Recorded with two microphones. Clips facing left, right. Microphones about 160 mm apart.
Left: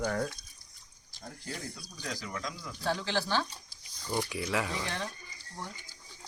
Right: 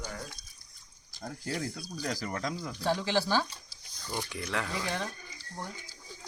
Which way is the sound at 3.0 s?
5° right (ahead or behind).